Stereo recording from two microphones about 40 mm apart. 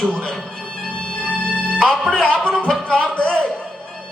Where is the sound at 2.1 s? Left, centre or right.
Left.